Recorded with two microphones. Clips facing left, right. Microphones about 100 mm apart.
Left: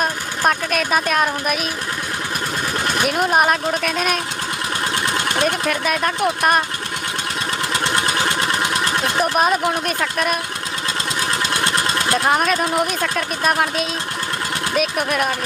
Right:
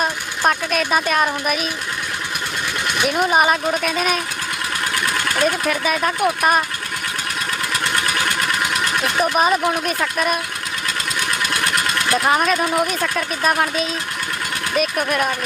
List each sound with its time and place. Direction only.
0.0 s speech: centre (ahead or behind)
2.8 s sewing machine: 40° left (ahead or behind)
3.1 s speech: centre (ahead or behind)
5.0 s engine: 25° left (ahead or behind)
5.5 s speech: centre (ahead or behind)
7.7 s vehicle: 25° left (ahead or behind)
9.2 s speech: centre (ahead or behind)
11.2 s engine: 25° left (ahead or behind)
12.2 s speech: centre (ahead or behind)